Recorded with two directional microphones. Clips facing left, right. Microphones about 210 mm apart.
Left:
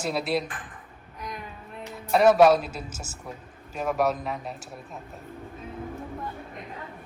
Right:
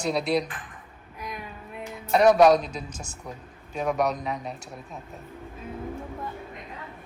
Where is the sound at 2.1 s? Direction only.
Centre (ahead or behind).